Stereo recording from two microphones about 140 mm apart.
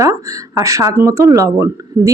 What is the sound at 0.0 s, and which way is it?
Speech, 25° right (ahead or behind).